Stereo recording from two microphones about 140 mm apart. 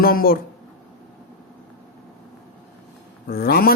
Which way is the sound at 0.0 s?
90° left.